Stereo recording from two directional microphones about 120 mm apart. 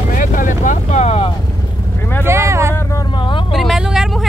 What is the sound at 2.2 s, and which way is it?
Vehicle, 20° right (ahead or behind).